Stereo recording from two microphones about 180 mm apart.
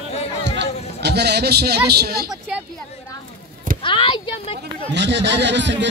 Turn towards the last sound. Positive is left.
turn(degrees=-75)  # may be behind; listen again after turning